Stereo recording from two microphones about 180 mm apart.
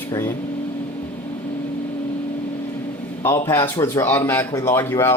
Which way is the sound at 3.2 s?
15° left (ahead or behind).